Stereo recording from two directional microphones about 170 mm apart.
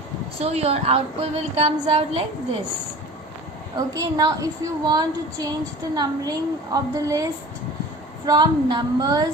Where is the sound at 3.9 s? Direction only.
20° right (ahead or behind).